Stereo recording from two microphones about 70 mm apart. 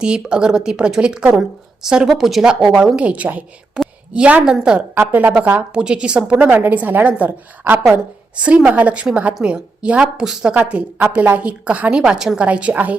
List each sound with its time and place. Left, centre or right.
0.0 s speech: centre
3.8 s a sound: centre
4.1 s a woman's voice: centre